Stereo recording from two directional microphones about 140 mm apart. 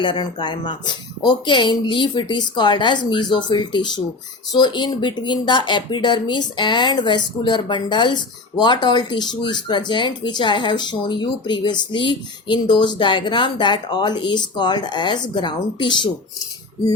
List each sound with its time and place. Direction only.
0.0 s speech: 35° left (ahead or behind)